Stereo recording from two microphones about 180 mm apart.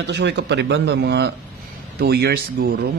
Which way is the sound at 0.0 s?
75° right (ahead or behind).